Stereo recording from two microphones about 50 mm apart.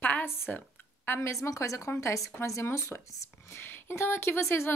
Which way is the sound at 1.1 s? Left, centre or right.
Left.